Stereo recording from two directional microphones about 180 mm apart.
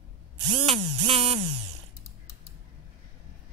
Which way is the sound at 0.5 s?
35° right (ahead or behind).